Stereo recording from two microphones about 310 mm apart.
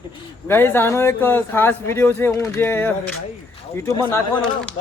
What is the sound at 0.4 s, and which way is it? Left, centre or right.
A man's voice, centre.